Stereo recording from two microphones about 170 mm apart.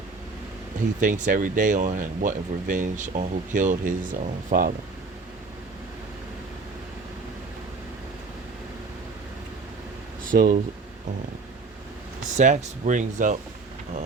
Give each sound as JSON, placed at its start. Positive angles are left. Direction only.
{"t": 0.9, "sound": "speech", "side_deg": -50}
{"t": 10.3, "sound": "speech", "side_deg": -55}
{"t": 12.4, "sound": "speech", "side_deg": -45}